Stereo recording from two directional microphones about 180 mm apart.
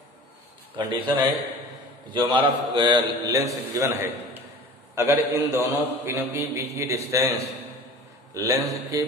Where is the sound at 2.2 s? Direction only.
25° right (ahead or behind).